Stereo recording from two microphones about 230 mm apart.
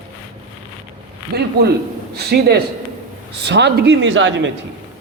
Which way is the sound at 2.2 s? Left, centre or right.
Right.